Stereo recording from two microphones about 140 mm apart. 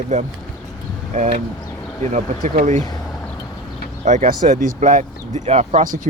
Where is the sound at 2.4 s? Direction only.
60° right (ahead or behind).